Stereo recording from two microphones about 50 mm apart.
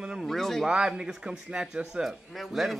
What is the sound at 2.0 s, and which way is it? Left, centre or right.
Speech, centre.